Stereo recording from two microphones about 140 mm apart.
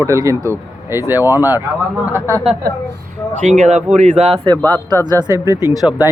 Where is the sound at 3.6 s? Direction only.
55° right (ahead or behind).